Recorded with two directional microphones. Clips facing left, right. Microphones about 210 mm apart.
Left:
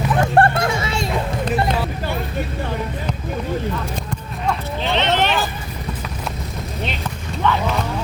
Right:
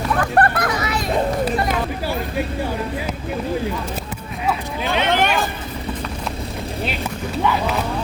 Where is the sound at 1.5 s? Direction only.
5° right (ahead or behind).